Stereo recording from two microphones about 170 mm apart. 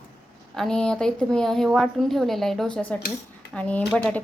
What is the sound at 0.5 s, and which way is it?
A woman's voice, 5° left (ahead or behind).